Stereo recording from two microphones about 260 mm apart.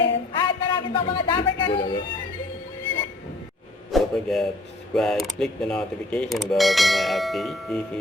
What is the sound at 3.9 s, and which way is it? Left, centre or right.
Speech, centre.